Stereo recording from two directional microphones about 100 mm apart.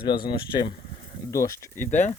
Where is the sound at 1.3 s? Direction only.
30° left (ahead or behind).